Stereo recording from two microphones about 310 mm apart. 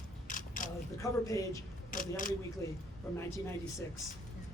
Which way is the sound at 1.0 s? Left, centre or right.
Centre.